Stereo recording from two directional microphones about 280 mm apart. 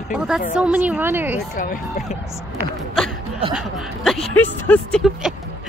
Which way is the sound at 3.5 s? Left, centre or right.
Centre.